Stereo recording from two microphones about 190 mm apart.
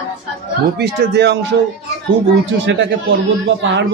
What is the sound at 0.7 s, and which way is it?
Speech, 65° right (ahead or behind).